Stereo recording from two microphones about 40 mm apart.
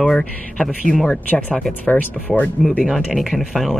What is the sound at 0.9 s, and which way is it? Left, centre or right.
Speech, left.